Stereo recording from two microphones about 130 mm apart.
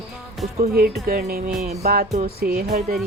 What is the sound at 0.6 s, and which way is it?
Music, 90° right.